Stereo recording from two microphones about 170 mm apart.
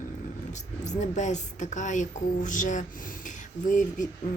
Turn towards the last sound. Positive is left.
turn(degrees=50)  # may be behind; listen again after turning